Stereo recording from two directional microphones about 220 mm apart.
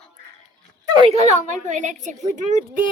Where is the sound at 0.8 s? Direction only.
20° right (ahead or behind); by 2.8 s 35° right (ahead or behind).